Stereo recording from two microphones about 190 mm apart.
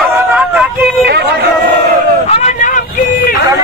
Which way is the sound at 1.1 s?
60° right (ahead or behind).